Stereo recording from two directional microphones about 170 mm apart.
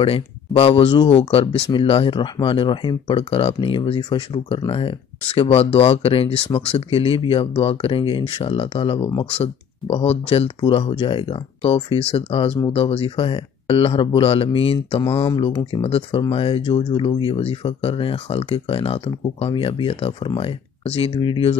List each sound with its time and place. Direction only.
0.0 s speech: 35° left (ahead or behind)